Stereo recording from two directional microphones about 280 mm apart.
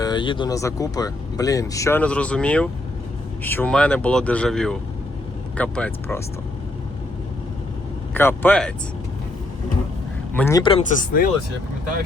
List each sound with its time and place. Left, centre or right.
0.0 s speech: centre
8.1 s speech: centre
10.3 s speech: centre; by 11.3 s left